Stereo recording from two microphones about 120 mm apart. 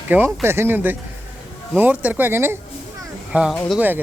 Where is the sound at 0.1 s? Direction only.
15° right (ahead or behind).